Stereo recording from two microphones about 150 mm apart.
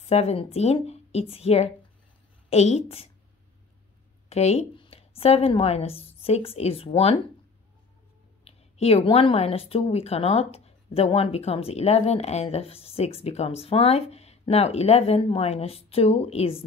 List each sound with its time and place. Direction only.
0.0 s a woman's voice: 45° left (ahead or behind)
4.3 s a woman's voice: 45° left (ahead or behind)
8.5 s a woman's voice: 45° left (ahead or behind)